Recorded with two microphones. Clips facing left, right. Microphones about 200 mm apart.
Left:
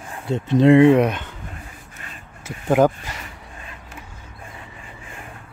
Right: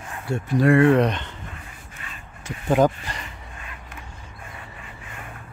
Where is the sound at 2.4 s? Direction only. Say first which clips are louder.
Left 2 dB; 10° left (ahead or behind).